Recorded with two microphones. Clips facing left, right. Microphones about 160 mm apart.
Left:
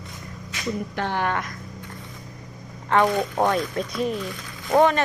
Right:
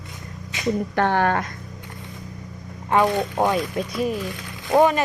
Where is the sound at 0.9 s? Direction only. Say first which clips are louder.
Right 6 dB; 50° right (ahead or behind).